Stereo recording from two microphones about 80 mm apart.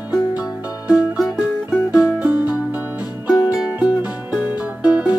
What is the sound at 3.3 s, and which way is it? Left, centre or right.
Music, left.